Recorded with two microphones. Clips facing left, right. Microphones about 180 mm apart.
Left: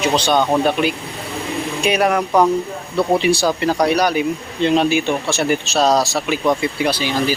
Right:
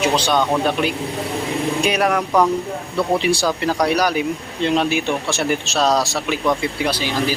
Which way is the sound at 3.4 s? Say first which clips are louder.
Left 2 dB; 25° left (ahead or behind).